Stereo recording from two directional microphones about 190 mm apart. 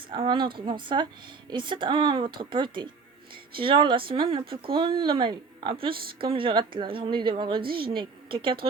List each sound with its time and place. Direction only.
0.1 s a woman's voice: 25° right (ahead or behind)